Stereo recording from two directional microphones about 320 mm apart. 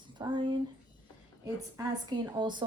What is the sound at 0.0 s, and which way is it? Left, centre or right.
Speech, centre.